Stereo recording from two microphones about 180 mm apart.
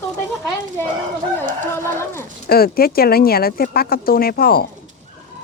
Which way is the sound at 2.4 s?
55° left (ahead or behind).